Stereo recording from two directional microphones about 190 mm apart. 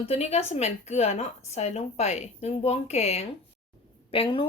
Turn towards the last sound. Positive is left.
turn(degrees=30)  # may be behind; listen again after turning